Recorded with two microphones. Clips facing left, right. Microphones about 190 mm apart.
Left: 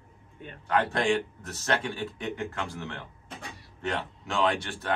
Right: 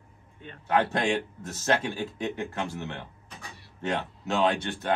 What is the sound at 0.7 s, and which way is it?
A man's voice, 25° right (ahead or behind).